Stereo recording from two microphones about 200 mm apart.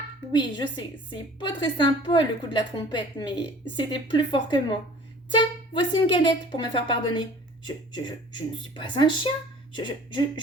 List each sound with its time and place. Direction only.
0.3 s a woman's voice: 20° left (ahead or behind)